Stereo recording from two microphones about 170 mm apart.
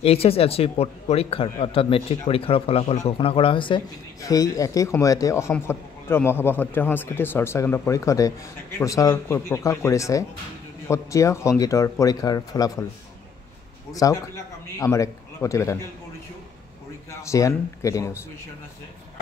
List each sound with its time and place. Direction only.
0.0 s a man's voice: 35° left (ahead or behind); by 12.8 s 20° left (ahead or behind)
13.9 s a man's voice: 20° left (ahead or behind)
17.2 s a man's voice: 20° left (ahead or behind)